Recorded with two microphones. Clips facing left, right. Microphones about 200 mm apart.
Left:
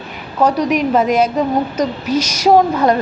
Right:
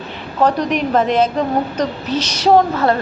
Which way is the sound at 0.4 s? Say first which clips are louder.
Left 2 dB; 10° left (ahead or behind).